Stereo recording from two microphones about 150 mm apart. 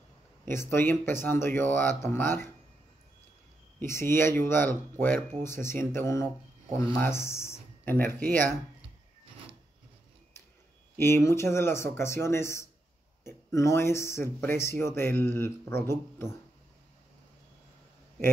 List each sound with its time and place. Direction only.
0.5 s speech: 15° left (ahead or behind)
3.8 s speech: 15° left (ahead or behind)
11.0 s speech: 15° left (ahead or behind)